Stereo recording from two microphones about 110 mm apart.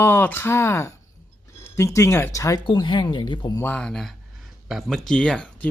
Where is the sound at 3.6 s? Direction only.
10° left (ahead or behind).